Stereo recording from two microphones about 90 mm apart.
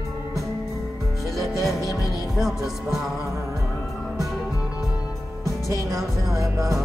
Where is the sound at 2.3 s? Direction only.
Centre (ahead or behind).